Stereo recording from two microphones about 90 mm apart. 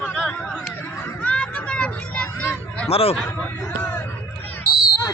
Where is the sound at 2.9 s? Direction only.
90° left.